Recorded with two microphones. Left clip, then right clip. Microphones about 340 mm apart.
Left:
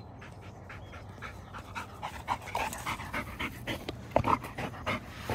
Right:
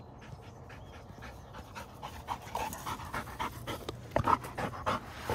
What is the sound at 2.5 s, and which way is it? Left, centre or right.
Dog, centre.